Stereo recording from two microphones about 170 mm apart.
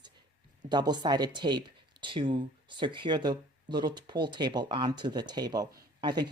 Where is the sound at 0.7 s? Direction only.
25° right (ahead or behind).